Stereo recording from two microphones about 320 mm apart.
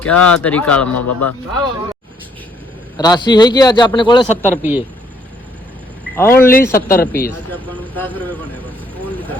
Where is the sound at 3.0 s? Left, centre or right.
Centre.